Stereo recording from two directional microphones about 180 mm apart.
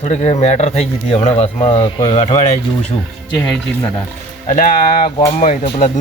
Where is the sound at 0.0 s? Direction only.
35° left (ahead or behind).